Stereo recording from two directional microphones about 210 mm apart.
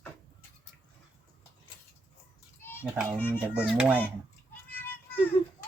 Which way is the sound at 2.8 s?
5° right (ahead or behind).